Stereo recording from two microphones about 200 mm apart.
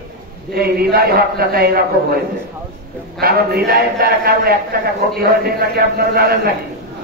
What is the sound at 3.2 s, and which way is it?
Speech, 50° right (ahead or behind).